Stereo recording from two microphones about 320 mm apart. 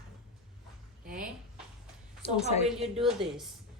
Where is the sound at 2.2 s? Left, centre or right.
Centre.